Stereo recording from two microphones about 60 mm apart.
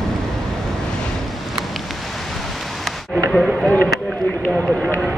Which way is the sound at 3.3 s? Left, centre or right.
Centre.